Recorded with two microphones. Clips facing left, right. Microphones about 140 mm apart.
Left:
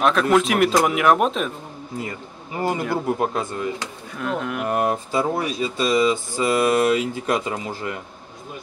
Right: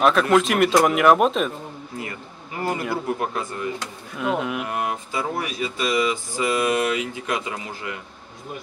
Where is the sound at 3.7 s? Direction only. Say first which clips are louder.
Even; 5° right (ahead or behind).